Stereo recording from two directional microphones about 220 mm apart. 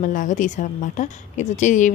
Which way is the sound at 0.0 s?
35° left (ahead or behind).